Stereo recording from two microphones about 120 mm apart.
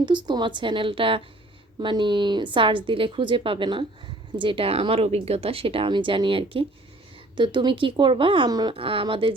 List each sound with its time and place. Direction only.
0.0 s speech: 40° right (ahead or behind)
8.4 s speech: 35° right (ahead or behind)
8.7 s speech: 50° right (ahead or behind)